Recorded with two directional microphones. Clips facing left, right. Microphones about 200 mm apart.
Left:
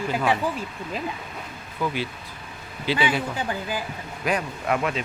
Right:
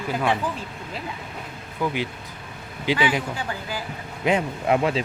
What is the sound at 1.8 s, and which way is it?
Speech, 15° right (ahead or behind).